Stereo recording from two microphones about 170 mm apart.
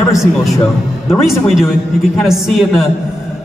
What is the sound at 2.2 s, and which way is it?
Speech, centre (ahead or behind).